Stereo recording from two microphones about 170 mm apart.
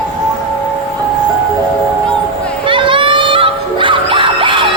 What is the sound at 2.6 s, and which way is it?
Music, 30° right (ahead or behind).